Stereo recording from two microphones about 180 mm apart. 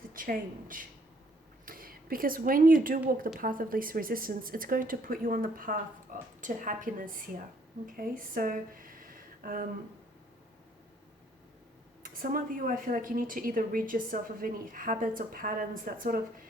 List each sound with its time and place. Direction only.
0.1 s a woman's voice: 50° right (ahead or behind)
6.1 s a sound: 50° right (ahead or behind)
6.4 s a woman's voice: 45° right (ahead or behind)
12.0 s a woman's voice: 50° right (ahead or behind)